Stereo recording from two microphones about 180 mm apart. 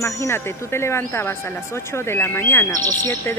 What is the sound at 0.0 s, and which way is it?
Speech, 15° left (ahead or behind).